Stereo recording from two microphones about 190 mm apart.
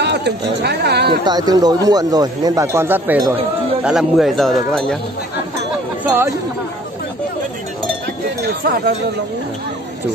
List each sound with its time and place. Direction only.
0.0 s speech: 60° right (ahead or behind)
1.2 s speech: 20° right (ahead or behind)
3.8 s speech: centre (ahead or behind)
6.0 s speech: 10° right (ahead or behind)
8.4 s speech: 55° right (ahead or behind)